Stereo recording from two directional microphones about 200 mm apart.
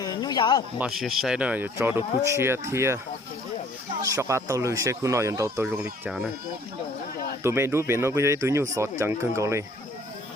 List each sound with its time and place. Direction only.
0.0 s a sound: 20° left (ahead or behind)
0.8 s speech: centre (ahead or behind)
4.0 s speech: 15° right (ahead or behind)
6.1 s speech: 5° right (ahead or behind)
7.4 s speech: 10° right (ahead or behind)